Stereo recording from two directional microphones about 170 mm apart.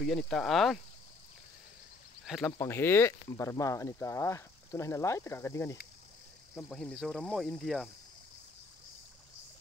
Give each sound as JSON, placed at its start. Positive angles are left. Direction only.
{"t": 0.2, "sound": "speech", "side_deg": 5}
{"t": 2.2, "sound": "speech", "side_deg": 0}
{"t": 2.6, "sound": "speech", "side_deg": 15}
{"t": 6.5, "sound": "speech", "side_deg": 5}